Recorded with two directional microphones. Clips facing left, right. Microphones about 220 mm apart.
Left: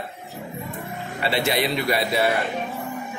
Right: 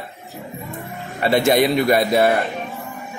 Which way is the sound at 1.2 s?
45° right (ahead or behind).